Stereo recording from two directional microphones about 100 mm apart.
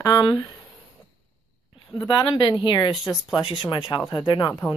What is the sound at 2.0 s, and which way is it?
Speech, 50° left (ahead or behind).